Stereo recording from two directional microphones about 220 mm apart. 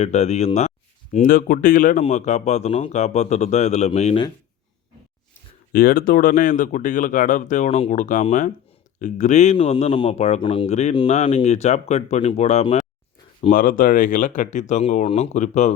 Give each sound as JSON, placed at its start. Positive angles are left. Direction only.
{"t": 0.0, "sound": "speech", "side_deg": 30}
{"t": 5.7, "sound": "speech", "side_deg": 40}